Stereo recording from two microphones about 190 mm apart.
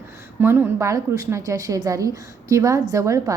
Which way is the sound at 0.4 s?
10° right (ahead or behind).